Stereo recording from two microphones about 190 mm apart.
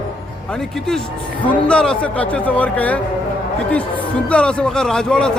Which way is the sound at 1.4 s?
5° left (ahead or behind).